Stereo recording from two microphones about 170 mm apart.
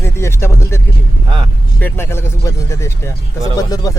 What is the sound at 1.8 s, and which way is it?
Speech, 15° left (ahead or behind).